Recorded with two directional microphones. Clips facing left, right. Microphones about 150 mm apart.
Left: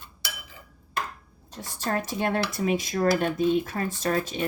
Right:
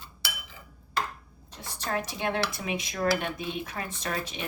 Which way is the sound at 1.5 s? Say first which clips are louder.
Left 3 dB; 45° left (ahead or behind).